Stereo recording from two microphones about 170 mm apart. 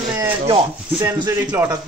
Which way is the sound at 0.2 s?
20° right (ahead or behind).